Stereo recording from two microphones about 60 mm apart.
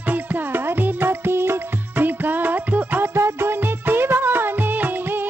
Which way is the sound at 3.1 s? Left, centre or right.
Right.